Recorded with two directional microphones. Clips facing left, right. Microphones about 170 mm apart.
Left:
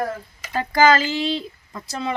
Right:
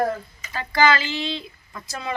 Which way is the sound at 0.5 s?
40° left (ahead or behind).